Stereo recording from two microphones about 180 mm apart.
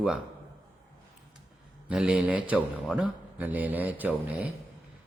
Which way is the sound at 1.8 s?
5° right (ahead or behind).